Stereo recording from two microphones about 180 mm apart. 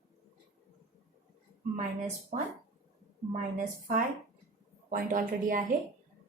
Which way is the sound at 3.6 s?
50° right (ahead or behind).